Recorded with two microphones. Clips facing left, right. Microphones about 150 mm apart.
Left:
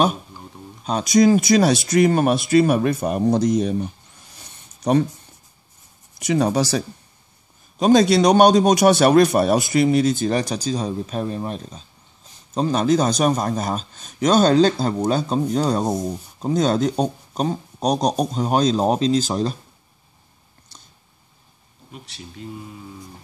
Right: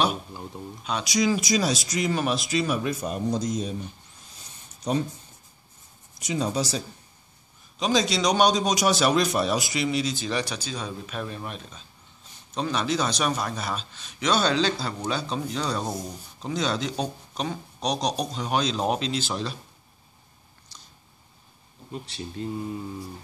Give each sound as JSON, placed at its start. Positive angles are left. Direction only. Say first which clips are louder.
{"t": 0.8, "sound": "speech", "louder": "left 9 dB", "side_deg": 45}
{"t": 4.4, "sound": "a sound", "louder": "left 3 dB", "side_deg": 65}
{"t": 6.1, "sound": "speech", "louder": "left 8 dB", "side_deg": 65}
{"t": 7.8, "sound": "a man's voice", "louder": "left 9 dB", "side_deg": 55}